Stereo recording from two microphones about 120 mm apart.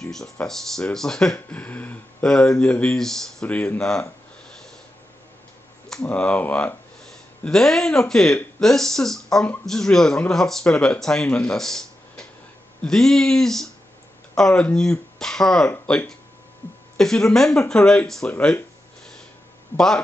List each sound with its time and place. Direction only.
0.0 s speech: 5° left (ahead or behind)
5.9 s speech: 5° left (ahead or behind)
19.7 s speech: 20° left (ahead or behind)